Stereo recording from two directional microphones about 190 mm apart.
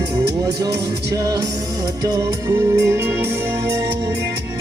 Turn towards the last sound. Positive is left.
turn(degrees=-10)  # may be behind; listen again after turning